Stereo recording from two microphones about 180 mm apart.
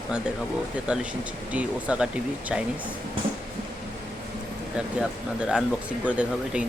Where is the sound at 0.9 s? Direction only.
5° right (ahead or behind).